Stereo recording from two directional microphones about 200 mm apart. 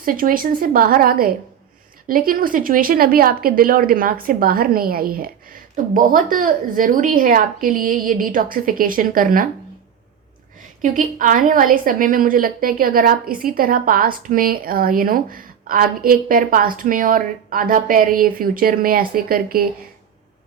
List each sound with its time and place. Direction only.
0.0 s a woman's voice: 45° right (ahead or behind)
10.6 s a woman's voice: 40° right (ahead or behind)